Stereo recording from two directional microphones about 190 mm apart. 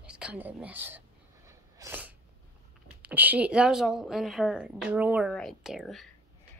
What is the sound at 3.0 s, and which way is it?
A woman's voice, 10° right (ahead or behind).